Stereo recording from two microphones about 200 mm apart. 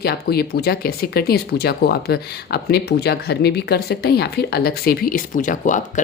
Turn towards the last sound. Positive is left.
turn(degrees=40)  # may be behind; listen again after turning